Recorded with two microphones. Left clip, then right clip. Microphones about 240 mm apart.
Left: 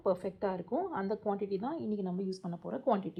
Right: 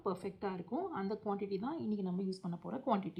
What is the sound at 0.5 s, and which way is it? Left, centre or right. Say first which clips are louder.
A woman's voice: left 5 dB; centre.